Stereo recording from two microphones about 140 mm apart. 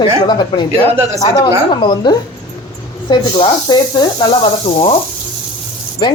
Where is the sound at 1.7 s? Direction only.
35° left (ahead or behind).